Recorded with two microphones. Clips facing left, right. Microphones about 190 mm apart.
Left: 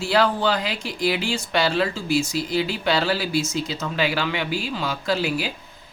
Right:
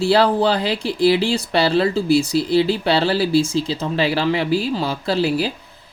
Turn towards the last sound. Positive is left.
turn(degrees=-35)  # may be behind; listen again after turning